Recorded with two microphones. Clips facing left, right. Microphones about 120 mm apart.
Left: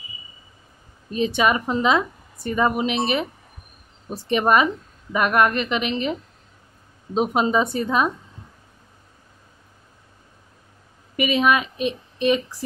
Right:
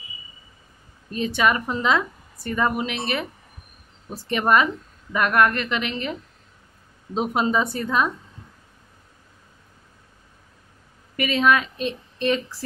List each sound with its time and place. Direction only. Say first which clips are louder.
1.1 s a woman's voice: left 2 dB; 20° left (ahead or behind)
7.2 s a woman's voice: left 2 dB; 20° left (ahead or behind)
11.1 s a woman's voice: left 1 dB; 15° left (ahead or behind)